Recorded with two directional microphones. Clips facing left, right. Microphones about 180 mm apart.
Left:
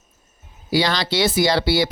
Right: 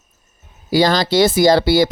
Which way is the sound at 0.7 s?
45° right (ahead or behind).